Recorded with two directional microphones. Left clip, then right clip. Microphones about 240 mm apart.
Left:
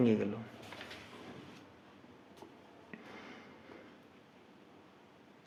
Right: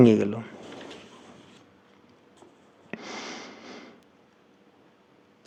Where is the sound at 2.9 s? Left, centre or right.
Right.